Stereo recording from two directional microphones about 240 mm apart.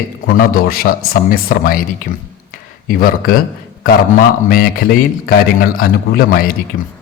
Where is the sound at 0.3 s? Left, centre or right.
Left.